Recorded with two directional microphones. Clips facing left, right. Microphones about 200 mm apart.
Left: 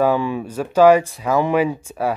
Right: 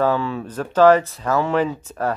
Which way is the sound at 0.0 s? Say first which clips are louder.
Left 2 dB; 15° left (ahead or behind).